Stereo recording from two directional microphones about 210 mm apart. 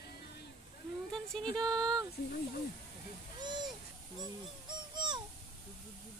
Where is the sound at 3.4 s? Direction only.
20° right (ahead or behind).